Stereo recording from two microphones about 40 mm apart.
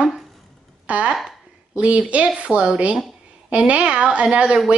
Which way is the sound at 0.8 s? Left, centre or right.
Right.